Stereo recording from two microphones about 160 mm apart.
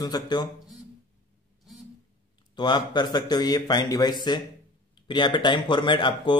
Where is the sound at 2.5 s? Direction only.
30° left (ahead or behind).